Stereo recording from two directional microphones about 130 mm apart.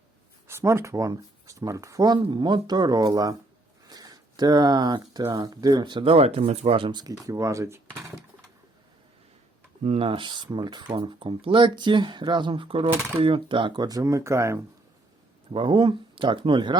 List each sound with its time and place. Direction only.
0.4 s speech: 20° right (ahead or behind)
3.8 s a sound: 30° right (ahead or behind)
5.3 s speech: 30° right (ahead or behind)
6.1 s speech: 50° right (ahead or behind); by 8.1 s 20° right (ahead or behind)
9.8 s speech: 50° right (ahead or behind); by 14.6 s 20° right (ahead or behind)
15.5 s speech: 40° right (ahead or behind)